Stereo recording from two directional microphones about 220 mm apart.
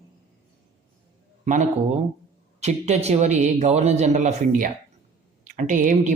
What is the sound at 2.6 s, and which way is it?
Speech, 30° right (ahead or behind).